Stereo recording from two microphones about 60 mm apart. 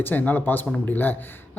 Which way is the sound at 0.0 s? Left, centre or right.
Left.